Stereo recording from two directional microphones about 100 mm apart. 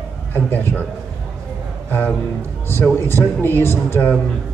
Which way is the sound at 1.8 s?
20° left (ahead or behind).